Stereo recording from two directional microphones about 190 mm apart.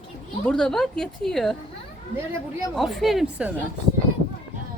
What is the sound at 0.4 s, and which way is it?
A woman's voice, 5° left (ahead or behind).